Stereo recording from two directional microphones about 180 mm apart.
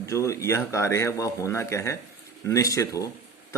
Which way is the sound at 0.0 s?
15° left (ahead or behind).